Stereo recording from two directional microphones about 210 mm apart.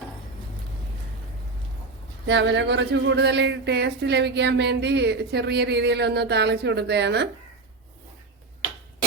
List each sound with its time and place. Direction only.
2.2 s speech: 60° right (ahead or behind)